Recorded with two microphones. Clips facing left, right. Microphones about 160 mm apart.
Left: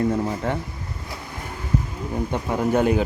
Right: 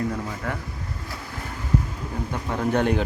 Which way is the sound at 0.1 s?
25° left (ahead or behind).